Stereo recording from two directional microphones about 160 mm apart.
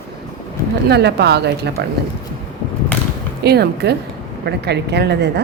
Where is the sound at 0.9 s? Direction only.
90° right.